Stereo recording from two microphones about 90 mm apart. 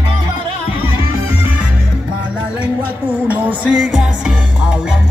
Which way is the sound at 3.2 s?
20° right (ahead or behind).